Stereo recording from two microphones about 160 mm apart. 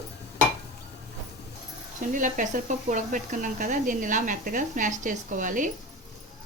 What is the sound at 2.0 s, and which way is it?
Speech, 55° right (ahead or behind).